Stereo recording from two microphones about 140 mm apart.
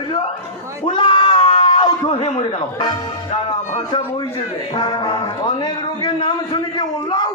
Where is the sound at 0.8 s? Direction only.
35° left (ahead or behind).